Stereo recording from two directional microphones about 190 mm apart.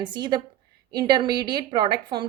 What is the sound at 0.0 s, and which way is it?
A woman's voice, 25° right (ahead or behind).